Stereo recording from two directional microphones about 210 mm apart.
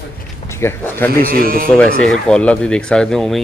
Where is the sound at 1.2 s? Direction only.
45° right (ahead or behind).